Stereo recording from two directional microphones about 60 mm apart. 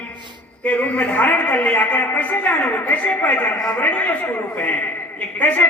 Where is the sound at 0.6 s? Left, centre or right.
Left.